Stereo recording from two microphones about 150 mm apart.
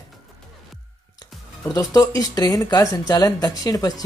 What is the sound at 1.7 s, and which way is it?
Speech, 20° left (ahead or behind).